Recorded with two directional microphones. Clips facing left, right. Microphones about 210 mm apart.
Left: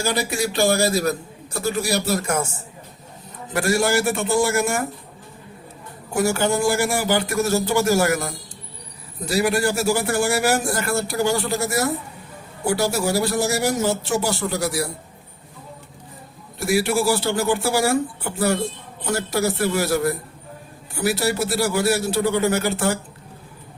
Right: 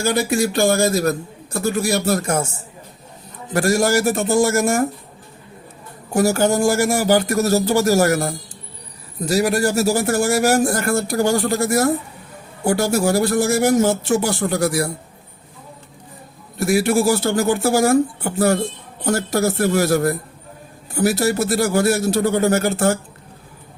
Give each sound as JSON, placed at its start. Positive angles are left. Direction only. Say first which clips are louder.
{"t": 0.0, "sound": "speech", "louder": "right 4 dB", "side_deg": -50}
{"t": 3.5, "sound": "speech", "louder": "right 3 dB", "side_deg": -40}
{"t": 6.1, "sound": "speech", "louder": "right 4 dB", "side_deg": -40}
{"t": 16.6, "sound": "speech", "louder": "right 3 dB", "side_deg": -50}